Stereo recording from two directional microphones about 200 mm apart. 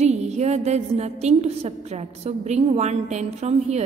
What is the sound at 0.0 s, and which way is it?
A woman's voice, 35° right (ahead or behind).